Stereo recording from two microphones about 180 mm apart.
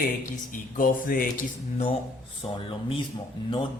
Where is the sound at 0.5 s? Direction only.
50° left (ahead or behind).